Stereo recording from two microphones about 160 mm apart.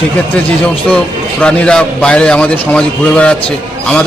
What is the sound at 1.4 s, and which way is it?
A man's voice, 5° left (ahead or behind).